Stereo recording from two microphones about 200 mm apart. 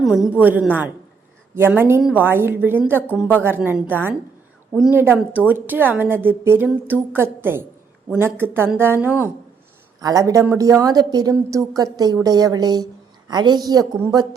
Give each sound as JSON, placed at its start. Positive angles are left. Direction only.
{"t": 0.0, "sound": "a woman's voice", "side_deg": -5}